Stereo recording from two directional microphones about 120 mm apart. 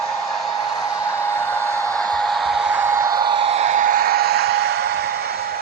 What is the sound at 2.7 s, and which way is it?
Vehicle, 20° right (ahead or behind).